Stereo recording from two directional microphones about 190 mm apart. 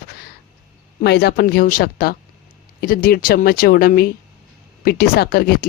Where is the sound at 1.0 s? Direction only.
60° left (ahead or behind).